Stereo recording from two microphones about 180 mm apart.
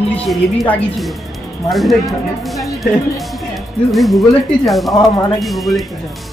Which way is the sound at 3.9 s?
Centre (ahead or behind).